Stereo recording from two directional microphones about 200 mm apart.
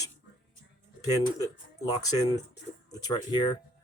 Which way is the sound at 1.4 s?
20° left (ahead or behind).